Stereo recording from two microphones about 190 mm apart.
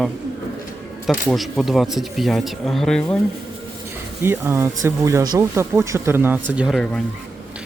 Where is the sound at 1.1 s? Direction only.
Centre (ahead or behind).